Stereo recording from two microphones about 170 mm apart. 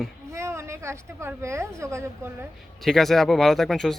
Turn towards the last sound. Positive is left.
turn(degrees=0)  # may be behind; listen again after turning